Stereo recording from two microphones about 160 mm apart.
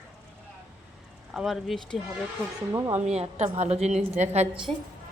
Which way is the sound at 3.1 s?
40° right (ahead or behind).